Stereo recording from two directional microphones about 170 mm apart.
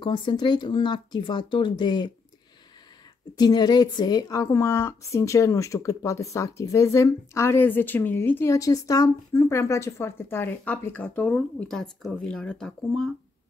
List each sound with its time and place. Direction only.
0.0 s speech: 30° left (ahead or behind)
3.3 s a woman's voice: 25° left (ahead or behind); by 13.1 s centre (ahead or behind)